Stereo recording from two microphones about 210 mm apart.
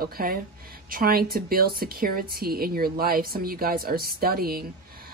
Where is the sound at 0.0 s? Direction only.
45° right (ahead or behind).